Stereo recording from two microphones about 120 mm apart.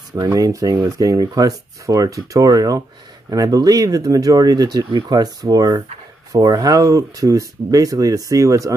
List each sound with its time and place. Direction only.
0.2 s speech: 30° right (ahead or behind)